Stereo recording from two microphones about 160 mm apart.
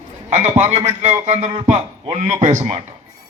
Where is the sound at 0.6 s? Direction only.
45° right (ahead or behind).